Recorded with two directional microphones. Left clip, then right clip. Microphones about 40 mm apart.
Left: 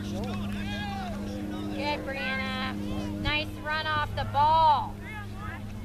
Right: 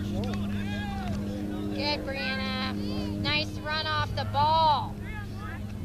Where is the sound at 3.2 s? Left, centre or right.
Right.